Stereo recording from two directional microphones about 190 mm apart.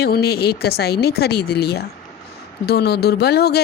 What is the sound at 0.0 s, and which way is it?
Speech, 55° left (ahead or behind).